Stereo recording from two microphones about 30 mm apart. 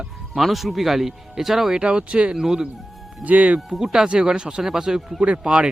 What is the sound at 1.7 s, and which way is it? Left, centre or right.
Speech, right.